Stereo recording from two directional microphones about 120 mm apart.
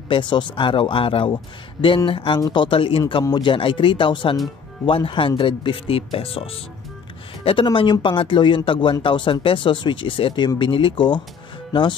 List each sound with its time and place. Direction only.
0.1 s speech: 40° left (ahead or behind)